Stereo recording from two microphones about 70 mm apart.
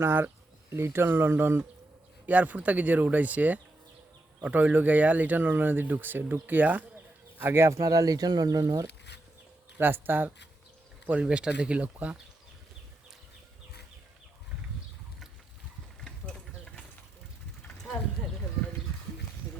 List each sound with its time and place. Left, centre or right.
0.0 s speech: right
2.2 s speech: right
7.8 s speech: right
9.7 s speech: right
11.0 s speech: centre
16.3 s vehicle: centre